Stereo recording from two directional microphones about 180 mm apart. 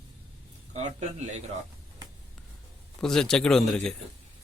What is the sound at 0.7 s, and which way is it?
Speech, 40° right (ahead or behind).